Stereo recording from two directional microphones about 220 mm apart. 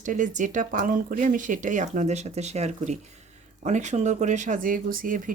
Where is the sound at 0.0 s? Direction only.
35° right (ahead or behind).